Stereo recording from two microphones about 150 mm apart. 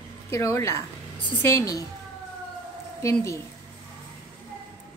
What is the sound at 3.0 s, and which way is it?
Speech, 20° left (ahead or behind).